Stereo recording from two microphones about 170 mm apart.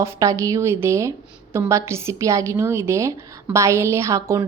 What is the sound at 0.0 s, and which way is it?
A woman's voice, 20° right (ahead or behind).